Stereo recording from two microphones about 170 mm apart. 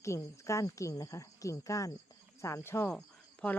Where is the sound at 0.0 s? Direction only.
15° left (ahead or behind).